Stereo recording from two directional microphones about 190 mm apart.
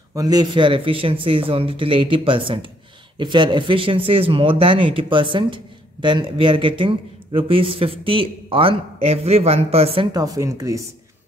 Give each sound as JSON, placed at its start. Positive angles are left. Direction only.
{"t": 0.1, "sound": "speech", "side_deg": -20}
{"t": 10.1, "sound": "speech", "side_deg": -20}